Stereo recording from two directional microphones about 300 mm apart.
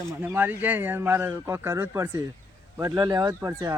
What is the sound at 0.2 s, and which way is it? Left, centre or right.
Speech, centre.